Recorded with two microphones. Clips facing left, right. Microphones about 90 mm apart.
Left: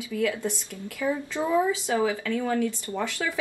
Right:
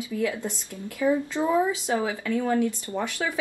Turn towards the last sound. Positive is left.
turn(degrees=-20)  # may be behind; listen again after turning